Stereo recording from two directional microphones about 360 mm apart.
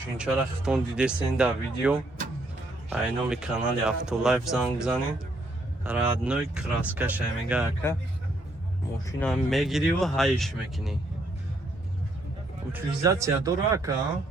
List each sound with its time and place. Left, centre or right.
0.2 s speech: centre
9.0 s speech: centre
12.7 s speech: centre